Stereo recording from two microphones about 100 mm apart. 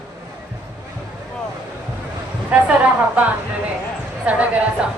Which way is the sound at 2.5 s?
15° right (ahead or behind).